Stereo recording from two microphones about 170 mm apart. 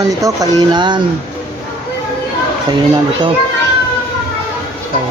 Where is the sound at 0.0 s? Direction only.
20° right (ahead or behind).